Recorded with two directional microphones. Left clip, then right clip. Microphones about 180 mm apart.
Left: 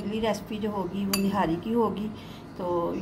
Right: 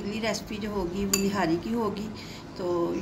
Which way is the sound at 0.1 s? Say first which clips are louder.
Left 3 dB; 40° left (ahead or behind).